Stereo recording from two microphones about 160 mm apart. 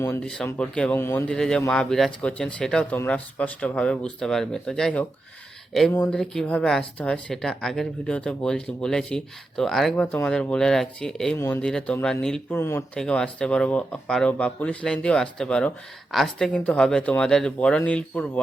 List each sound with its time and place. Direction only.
0.0 s speech: 15° left (ahead or behind)
5.9 s speech: 15° left (ahead or behind)
11.3 s speech: 15° left (ahead or behind)
11.6 s speech: 5° left (ahead or behind)